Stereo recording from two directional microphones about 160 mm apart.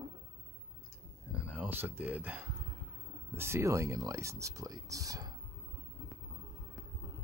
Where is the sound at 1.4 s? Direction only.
10° right (ahead or behind).